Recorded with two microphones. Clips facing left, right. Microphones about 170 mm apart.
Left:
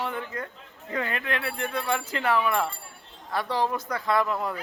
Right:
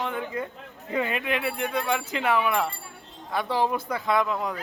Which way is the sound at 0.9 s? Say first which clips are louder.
Right 3 dB; 15° right (ahead or behind).